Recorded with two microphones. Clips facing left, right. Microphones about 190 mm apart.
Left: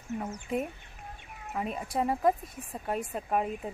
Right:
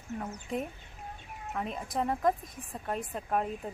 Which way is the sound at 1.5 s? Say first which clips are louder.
Left 2 dB; 10° left (ahead or behind).